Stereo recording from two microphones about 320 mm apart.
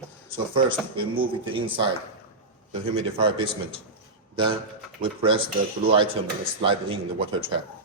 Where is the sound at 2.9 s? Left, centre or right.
Centre.